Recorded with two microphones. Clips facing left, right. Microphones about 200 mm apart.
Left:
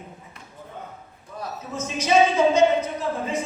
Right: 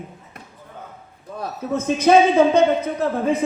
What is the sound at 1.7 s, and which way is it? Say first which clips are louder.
A woman's voice: right 6 dB; 60° right (ahead or behind).